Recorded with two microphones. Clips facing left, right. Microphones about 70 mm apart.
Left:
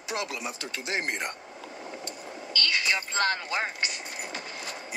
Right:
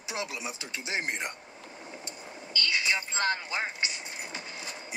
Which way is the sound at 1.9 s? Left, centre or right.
Left.